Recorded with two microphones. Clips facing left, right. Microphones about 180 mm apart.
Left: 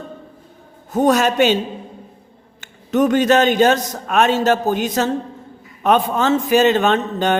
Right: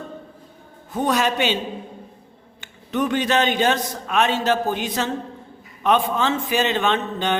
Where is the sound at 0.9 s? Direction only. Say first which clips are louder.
Left 6 dB; 45° left (ahead or behind).